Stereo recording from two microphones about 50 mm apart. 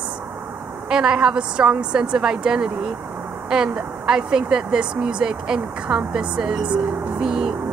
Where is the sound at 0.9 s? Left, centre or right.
Centre.